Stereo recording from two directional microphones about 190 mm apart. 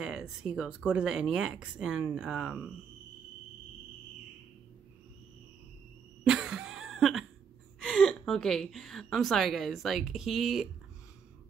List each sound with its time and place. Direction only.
0.0 s speech: 5° right (ahead or behind)
6.2 s cough: 5° right (ahead or behind)
7.8 s a woman's voice: 5° left (ahead or behind)